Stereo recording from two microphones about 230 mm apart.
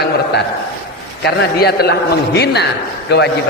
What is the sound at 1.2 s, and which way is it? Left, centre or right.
A man's voice, left.